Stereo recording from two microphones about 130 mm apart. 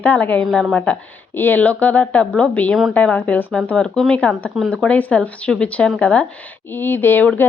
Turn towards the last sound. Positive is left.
turn(degrees=15)  # may be behind; listen again after turning